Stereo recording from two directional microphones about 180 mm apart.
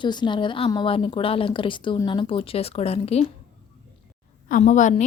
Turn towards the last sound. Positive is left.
turn(degrees=45)  # may be behind; listen again after turning